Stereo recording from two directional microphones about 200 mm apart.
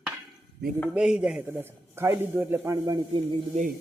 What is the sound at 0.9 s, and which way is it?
A man's voice, 5° right (ahead or behind).